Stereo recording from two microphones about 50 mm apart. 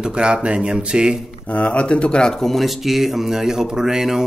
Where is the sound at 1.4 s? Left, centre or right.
Left; by 4.2 s centre.